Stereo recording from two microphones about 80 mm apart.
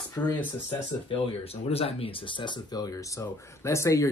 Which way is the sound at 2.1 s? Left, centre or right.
Left.